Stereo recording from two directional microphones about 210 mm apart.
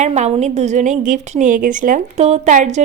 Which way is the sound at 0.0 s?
30° right (ahead or behind).